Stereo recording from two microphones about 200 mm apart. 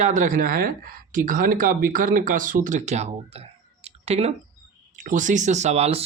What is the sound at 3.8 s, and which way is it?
Clicking, 30° right (ahead or behind).